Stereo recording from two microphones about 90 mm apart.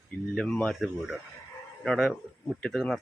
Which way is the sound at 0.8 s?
Centre (ahead or behind).